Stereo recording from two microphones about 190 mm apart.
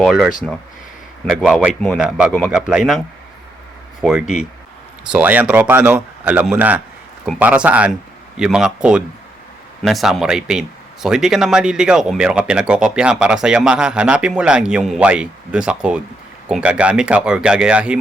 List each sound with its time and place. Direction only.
0.0 s speech: centre (ahead or behind)
1.4 s speech: centre (ahead or behind)
4.0 s speech: 5° right (ahead or behind)